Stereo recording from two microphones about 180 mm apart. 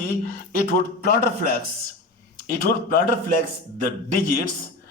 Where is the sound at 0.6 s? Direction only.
50° left (ahead or behind).